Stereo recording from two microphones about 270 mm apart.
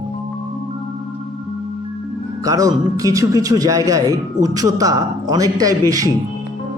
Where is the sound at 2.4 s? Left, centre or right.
Centre.